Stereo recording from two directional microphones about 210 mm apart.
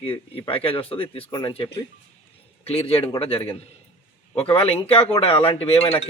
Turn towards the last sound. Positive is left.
turn(degrees=30)  # may be behind; listen again after turning